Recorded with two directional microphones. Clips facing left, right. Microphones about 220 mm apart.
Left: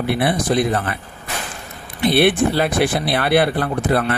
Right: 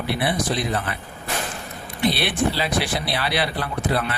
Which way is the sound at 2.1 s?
55° left (ahead or behind).